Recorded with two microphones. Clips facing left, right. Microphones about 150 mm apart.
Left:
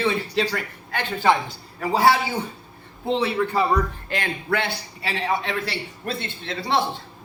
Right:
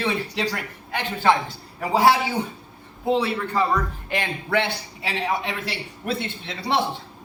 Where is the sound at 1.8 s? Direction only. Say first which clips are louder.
Even; 20° right (ahead or behind).